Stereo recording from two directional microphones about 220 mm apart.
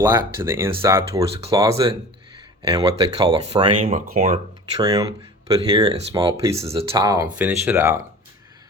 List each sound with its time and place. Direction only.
0.0 s speech: 10° right (ahead or behind)
1.1 s speech: 25° right (ahead or behind)
1.5 s speech: 15° right (ahead or behind)
3.8 s speech: 40° right (ahead or behind)
4.8 s speech: 15° right (ahead or behind)